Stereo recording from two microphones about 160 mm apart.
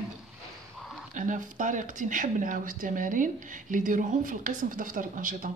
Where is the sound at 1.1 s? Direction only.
55° right (ahead or behind).